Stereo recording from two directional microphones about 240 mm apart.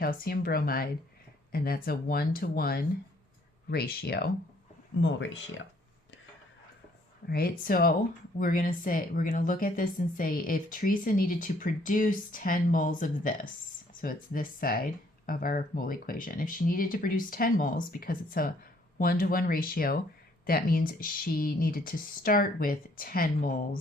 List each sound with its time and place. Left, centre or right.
0.0 s speech: left
7.3 s speech: left